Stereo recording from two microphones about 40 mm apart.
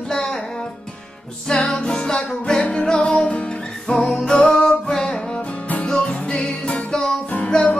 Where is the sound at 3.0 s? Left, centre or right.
Left.